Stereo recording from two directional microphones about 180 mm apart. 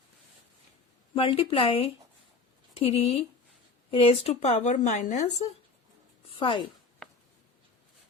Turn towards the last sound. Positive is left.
turn(degrees=30)  # may be behind; listen again after turning